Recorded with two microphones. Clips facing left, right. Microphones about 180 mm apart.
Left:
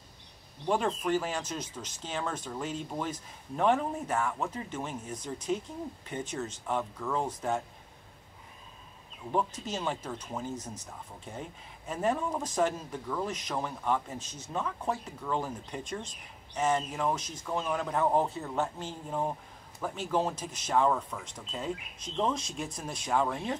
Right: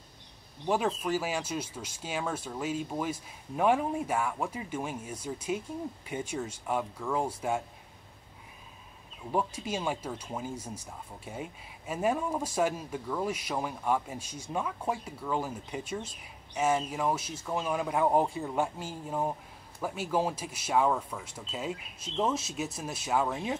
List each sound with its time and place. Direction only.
0.7 s speech: 5° right (ahead or behind)
9.3 s speech: 10° right (ahead or behind)